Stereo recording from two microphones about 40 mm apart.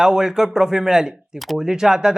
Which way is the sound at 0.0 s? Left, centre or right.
Centre.